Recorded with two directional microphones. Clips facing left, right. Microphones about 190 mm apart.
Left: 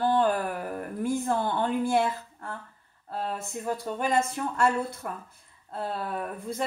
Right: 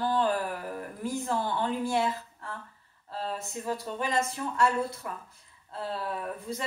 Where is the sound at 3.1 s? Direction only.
55° left (ahead or behind).